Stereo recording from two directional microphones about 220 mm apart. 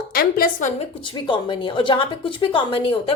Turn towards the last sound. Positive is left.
turn(degrees=25)  # may be behind; listen again after turning